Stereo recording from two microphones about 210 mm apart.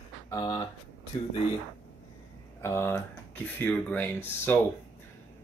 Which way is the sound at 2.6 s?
10° left (ahead or behind).